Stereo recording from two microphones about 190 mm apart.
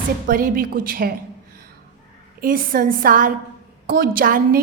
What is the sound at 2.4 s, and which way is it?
Speech, 50° right (ahead or behind).